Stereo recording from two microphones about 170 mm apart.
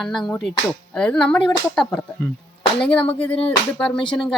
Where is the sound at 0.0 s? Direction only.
Centre (ahead or behind).